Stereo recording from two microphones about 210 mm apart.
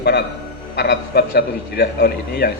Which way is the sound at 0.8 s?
55° left (ahead or behind).